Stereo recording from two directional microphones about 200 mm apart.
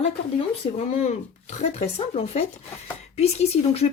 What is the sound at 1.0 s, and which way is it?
Speech, 35° left (ahead or behind).